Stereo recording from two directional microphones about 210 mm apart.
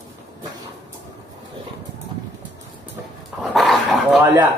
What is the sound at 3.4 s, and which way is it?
Dog, centre (ahead or behind).